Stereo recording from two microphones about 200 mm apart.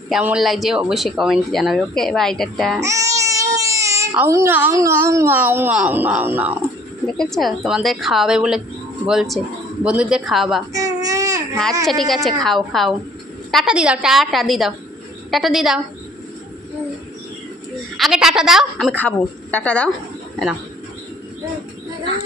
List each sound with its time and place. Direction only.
0.1 s speech: 5° right (ahead or behind)
2.8 s speech: 15° right (ahead or behind)
10.7 s baby cry: 15° right (ahead or behind)
11.8 s speech: centre (ahead or behind)
17.9 s speech: centre (ahead or behind)